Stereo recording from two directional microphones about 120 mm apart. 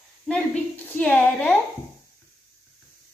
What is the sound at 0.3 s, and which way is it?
A woman's voice, 15° left (ahead or behind).